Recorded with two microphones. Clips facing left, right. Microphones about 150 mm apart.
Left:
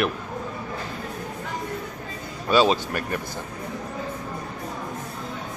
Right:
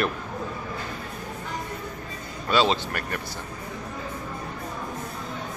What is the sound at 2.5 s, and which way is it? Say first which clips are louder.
Speech: left 3 dB; 15° left (ahead or behind).